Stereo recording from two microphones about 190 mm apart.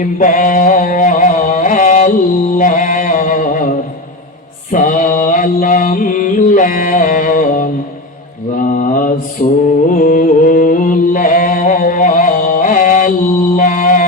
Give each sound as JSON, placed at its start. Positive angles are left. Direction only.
{"t": 0.2, "sound": "music", "side_deg": 45}
{"t": 4.7, "sound": "mantra", "side_deg": 45}
{"t": 9.6, "sound": "music", "side_deg": 45}